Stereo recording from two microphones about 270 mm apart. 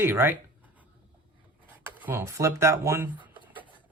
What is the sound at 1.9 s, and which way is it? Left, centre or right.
Speech, centre.